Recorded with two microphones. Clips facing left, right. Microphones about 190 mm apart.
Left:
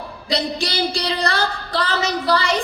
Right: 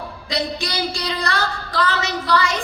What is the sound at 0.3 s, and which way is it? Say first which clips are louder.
A woman's voice: left 2 dB; 35° left (ahead or behind).